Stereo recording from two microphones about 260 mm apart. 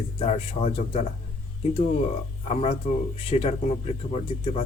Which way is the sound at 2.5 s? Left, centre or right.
Left.